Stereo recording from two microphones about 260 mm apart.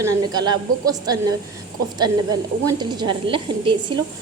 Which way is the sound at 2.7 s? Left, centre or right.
Centre.